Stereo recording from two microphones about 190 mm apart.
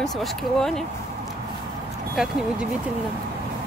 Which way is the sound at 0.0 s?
Centre (ahead or behind).